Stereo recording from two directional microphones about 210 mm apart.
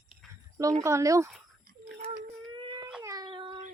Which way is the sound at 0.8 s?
15° right (ahead or behind).